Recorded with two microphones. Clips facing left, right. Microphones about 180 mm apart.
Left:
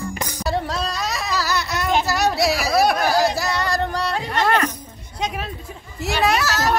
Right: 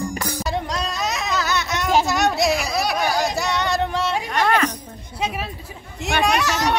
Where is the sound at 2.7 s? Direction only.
55° left (ahead or behind).